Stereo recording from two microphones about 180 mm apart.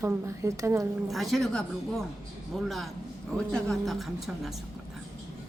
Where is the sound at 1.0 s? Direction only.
Centre (ahead or behind).